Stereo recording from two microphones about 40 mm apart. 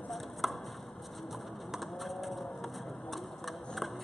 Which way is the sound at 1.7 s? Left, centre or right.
Centre.